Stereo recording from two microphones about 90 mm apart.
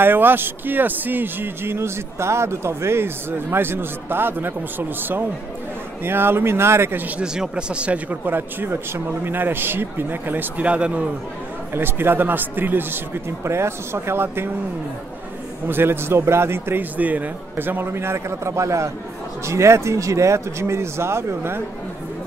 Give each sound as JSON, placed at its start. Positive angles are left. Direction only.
{"t": 0.0, "sound": "a man's voice", "side_deg": -20}
{"t": 7.2, "sound": "a man's voice", "side_deg": -10}
{"t": 11.7, "sound": "a man's voice", "side_deg": -25}
{"t": 15.7, "sound": "a man's voice", "side_deg": -25}